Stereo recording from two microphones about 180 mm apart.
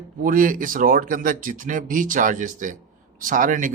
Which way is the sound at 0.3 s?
50° right (ahead or behind).